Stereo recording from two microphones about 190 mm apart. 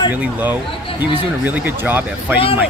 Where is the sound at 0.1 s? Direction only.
10° right (ahead or behind).